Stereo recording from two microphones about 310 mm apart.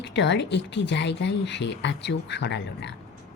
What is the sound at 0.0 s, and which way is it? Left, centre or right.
Speech, left.